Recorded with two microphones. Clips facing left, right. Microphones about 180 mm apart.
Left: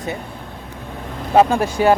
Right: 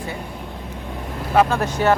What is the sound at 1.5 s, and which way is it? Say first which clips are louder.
Speech: left 3 dB; 10° left (ahead or behind).